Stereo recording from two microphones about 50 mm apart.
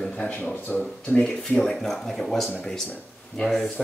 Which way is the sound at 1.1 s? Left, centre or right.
Centre.